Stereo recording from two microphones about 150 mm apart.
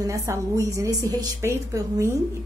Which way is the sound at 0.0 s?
20° right (ahead or behind).